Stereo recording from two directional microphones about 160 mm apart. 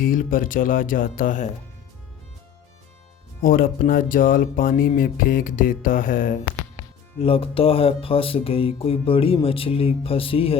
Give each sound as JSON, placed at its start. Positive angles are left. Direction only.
{"t": 0.0, "sound": "speech", "side_deg": 60}
{"t": 3.4, "sound": "speech", "side_deg": 60}
{"t": 7.2, "sound": "speech", "side_deg": 35}